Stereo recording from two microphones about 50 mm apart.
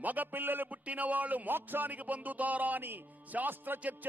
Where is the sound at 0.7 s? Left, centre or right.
Right.